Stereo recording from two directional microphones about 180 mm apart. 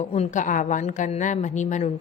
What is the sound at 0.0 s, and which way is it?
A woman's voice, 40° left (ahead or behind).